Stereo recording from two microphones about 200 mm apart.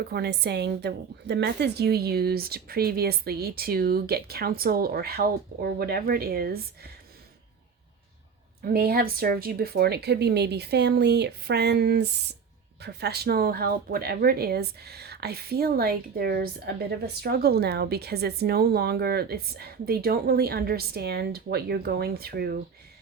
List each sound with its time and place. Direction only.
0.1 s speech: 55° right (ahead or behind)
8.6 s speech: 50° right (ahead or behind)